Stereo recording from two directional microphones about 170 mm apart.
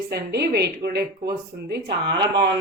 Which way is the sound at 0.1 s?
70° right (ahead or behind).